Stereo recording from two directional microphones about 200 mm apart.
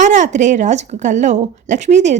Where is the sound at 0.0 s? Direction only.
35° right (ahead or behind).